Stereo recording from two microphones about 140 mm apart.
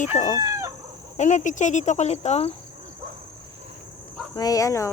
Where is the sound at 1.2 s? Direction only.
60° left (ahead or behind).